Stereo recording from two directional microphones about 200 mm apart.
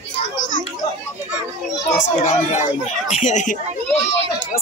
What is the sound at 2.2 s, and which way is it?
Speech, 35° left (ahead or behind).